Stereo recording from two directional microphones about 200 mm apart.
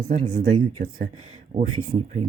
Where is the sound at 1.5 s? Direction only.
35° right (ahead or behind).